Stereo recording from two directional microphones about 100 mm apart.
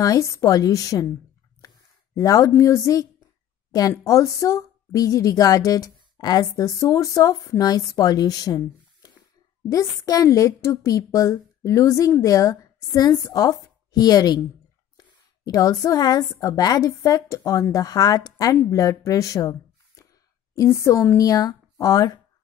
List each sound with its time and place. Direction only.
0.0 s a woman's voice: 35° left (ahead or behind)
2.1 s a woman's voice: 35° left (ahead or behind)
20.5 s a woman's voice: 30° left (ahead or behind)